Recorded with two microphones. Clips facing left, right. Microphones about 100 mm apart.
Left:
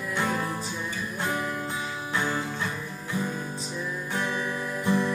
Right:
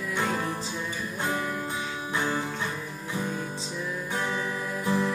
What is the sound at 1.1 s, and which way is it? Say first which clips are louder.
Music: even; 20° right (ahead or behind).